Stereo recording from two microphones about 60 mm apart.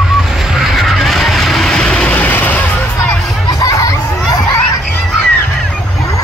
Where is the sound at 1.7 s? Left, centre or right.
Centre.